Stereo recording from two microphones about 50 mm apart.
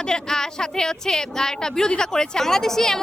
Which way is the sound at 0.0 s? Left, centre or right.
Centre.